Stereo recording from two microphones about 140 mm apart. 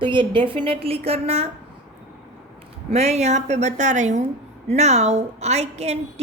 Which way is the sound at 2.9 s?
50° right (ahead or behind).